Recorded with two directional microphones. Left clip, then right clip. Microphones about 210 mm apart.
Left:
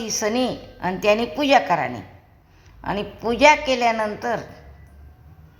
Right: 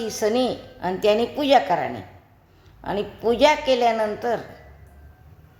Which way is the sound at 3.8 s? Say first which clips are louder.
Even; centre (ahead or behind).